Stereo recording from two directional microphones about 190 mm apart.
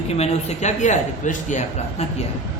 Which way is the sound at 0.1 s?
35° left (ahead or behind).